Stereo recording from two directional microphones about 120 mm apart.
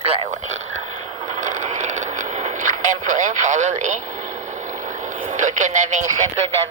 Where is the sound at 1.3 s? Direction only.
90° right.